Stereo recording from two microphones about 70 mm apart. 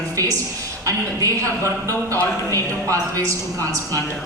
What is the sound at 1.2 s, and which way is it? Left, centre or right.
Speech, right.